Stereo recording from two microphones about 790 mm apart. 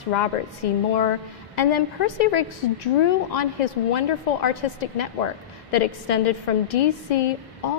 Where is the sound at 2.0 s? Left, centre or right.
Left.